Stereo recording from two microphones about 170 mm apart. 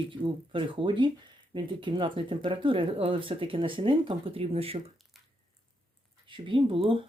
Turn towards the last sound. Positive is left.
turn(degrees=-30)  # may be behind; listen again after turning